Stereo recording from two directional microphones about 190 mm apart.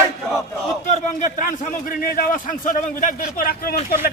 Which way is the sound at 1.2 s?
40° left (ahead or behind).